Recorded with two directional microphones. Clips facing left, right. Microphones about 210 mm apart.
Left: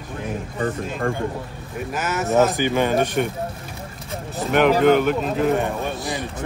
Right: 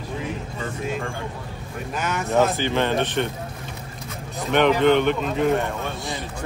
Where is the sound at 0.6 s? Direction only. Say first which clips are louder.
Left 4 dB; 50° left (ahead or behind).